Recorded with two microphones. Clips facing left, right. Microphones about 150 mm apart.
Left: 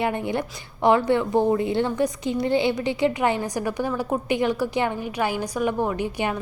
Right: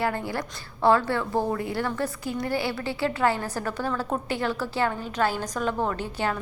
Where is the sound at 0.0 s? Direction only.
20° left (ahead or behind).